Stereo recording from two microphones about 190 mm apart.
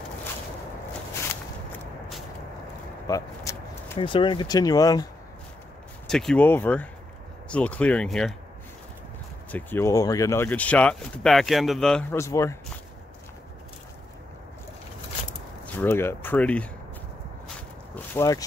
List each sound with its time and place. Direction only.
3.1 s vehicle: 15° left (ahead or behind)
4.0 s speech: 25° left (ahead or behind)
6.0 s speech: 5° left (ahead or behind)
9.5 s speech: 10° left (ahead or behind)
15.6 s speech: 10° left (ahead or behind)
17.9 s speech: 15° left (ahead or behind)